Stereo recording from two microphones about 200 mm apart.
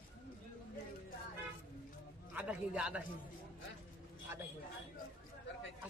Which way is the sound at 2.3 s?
5° right (ahead or behind).